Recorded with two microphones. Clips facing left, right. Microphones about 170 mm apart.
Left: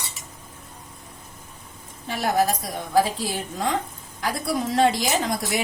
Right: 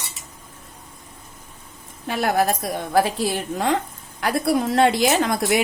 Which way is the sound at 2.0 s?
60° right (ahead or behind).